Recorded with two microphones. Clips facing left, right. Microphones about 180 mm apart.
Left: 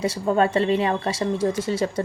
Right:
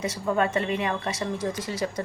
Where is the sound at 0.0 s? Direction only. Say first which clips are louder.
Left 5 dB; 30° left (ahead or behind).